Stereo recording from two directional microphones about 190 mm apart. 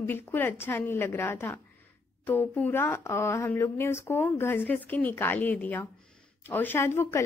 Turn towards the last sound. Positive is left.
turn(degrees=15)  # may be behind; listen again after turning